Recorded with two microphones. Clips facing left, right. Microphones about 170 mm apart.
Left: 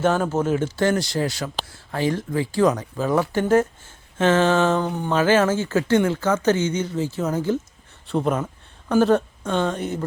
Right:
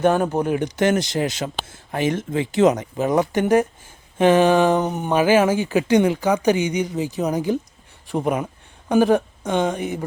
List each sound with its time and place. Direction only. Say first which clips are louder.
0.0 s speech: right 2 dB; 15° right (ahead or behind)